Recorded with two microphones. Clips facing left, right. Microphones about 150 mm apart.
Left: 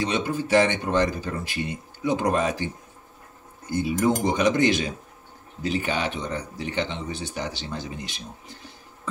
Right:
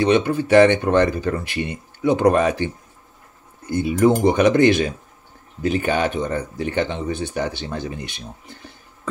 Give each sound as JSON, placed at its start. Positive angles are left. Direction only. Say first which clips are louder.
{"t": 0.0, "sound": "speech", "louder": "right 8 dB", "side_deg": -60}
{"t": 3.7, "sound": "speech", "louder": "right 6 dB", "side_deg": -60}